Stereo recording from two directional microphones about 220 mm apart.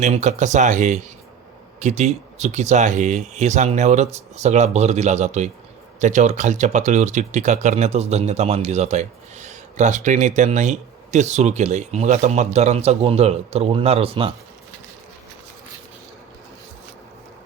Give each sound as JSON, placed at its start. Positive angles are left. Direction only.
{"t": 0.0, "sound": "speech", "side_deg": -30}